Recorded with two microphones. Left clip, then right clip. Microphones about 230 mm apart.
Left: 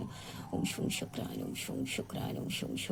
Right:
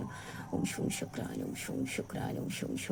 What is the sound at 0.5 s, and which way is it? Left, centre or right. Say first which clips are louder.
Speech: even; centre.